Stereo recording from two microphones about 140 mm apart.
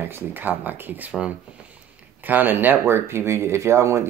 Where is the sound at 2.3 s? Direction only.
15° right (ahead or behind).